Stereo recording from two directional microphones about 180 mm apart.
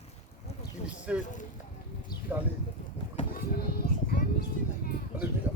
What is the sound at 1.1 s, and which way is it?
Speech, 5° right (ahead or behind).